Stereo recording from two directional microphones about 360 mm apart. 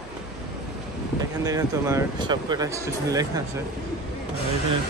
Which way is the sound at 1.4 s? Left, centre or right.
Centre.